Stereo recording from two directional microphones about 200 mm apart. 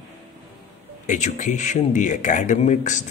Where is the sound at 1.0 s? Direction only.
40° left (ahead or behind).